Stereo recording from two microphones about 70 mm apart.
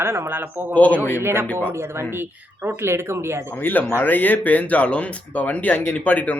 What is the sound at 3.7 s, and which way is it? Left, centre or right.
Speech, left.